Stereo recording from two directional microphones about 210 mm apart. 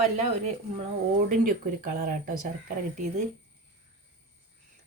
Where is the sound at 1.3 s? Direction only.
40° right (ahead or behind).